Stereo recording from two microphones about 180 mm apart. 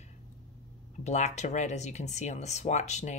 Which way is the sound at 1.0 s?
40° left (ahead or behind).